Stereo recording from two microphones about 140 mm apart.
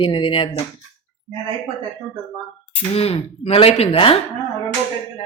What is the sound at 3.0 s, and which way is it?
Speech, 45° left (ahead or behind).